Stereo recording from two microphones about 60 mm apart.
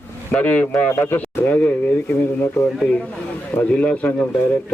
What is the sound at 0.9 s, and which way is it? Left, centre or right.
Speech, left.